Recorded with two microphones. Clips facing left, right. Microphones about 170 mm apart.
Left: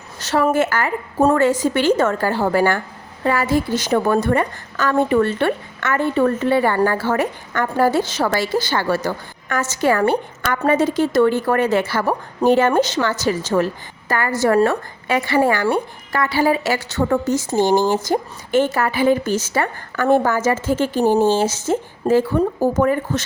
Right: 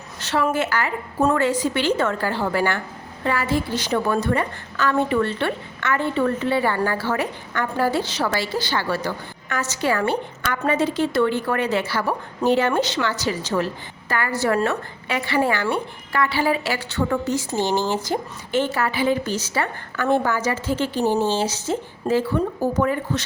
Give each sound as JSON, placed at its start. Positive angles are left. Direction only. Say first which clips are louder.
{"t": 0.2, "sound": "a woman's voice", "louder": "left 5 dB", "side_deg": 40}